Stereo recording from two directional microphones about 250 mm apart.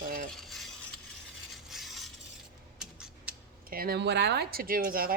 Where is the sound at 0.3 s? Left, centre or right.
Centre.